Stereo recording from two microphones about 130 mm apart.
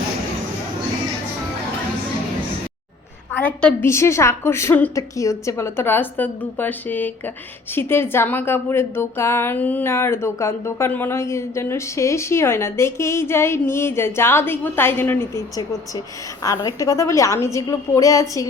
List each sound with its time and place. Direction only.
3.3 s a woman's voice: 10° left (ahead or behind)
16.6 s a woman's voice: 25° left (ahead or behind)